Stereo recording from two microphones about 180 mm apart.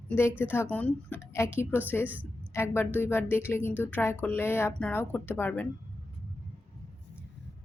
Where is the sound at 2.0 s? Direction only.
10° right (ahead or behind).